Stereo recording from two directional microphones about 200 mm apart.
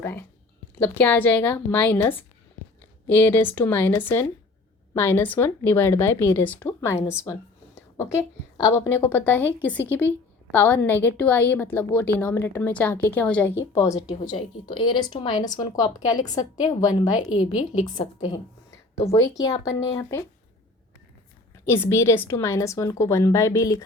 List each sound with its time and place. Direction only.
0.0 s a woman's voice: 10° left (ahead or behind)
7.8 s a sound: 15° left (ahead or behind)
8.5 s a woman's voice: 15° left (ahead or behind)
10.5 s a woman's voice: 10° left (ahead or behind)
14.3 s a woman's voice: 25° left (ahead or behind)
17.9 s a woman's voice: 30° left (ahead or behind)
19.4 s a woman's voice: 20° left (ahead or behind)
21.7 s a woman's voice: 10° left (ahead or behind)